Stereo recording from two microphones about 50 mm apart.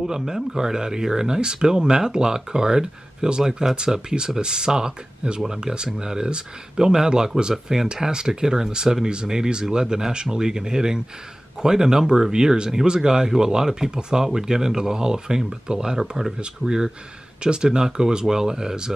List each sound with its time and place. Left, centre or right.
0.0 s speech: centre